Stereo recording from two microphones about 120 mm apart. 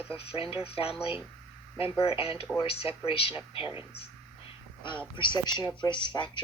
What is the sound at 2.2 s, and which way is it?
Speech, 55° left (ahead or behind).